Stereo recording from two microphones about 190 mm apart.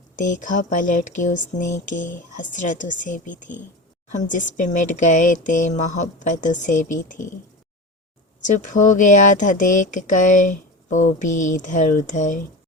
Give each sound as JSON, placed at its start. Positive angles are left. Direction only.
{"t": 0.2, "sound": "speech", "side_deg": 45}
{"t": 8.4, "sound": "speech", "side_deg": 40}